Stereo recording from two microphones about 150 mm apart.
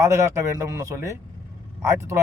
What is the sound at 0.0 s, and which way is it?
A man's voice, 20° right (ahead or behind).